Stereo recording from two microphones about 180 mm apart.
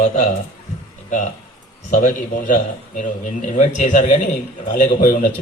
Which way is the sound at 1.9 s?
50° left (ahead or behind).